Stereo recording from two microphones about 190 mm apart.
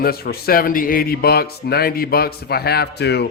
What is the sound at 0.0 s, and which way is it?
A man's voice, 55° left (ahead or behind).